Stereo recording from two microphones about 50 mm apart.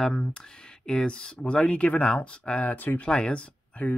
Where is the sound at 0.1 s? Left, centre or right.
Left.